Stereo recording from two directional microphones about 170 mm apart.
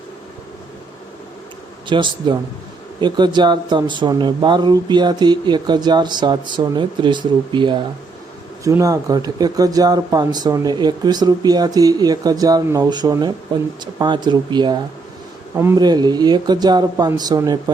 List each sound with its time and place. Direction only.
1.9 s speech: 25° right (ahead or behind)